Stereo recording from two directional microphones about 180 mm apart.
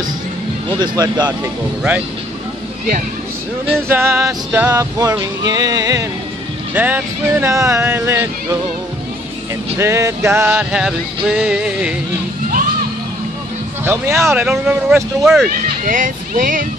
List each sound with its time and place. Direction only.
0.7 s speech: 25° right (ahead or behind)
3.9 s music: 15° right (ahead or behind)
9.8 s music: 15° right (ahead or behind)
13.8 s music: 15° right (ahead or behind)
14.4 s speech: 5° right (ahead or behind)
15.8 s speech: 45° right (ahead or behind)